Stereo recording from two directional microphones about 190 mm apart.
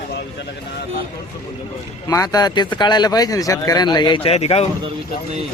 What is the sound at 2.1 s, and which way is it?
Speech, 20° left (ahead or behind).